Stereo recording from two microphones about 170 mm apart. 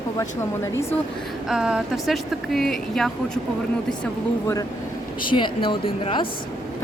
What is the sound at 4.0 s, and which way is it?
Speech, 15° left (ahead or behind).